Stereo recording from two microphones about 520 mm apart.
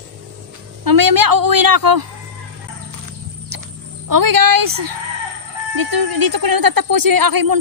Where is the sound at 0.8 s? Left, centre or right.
Right.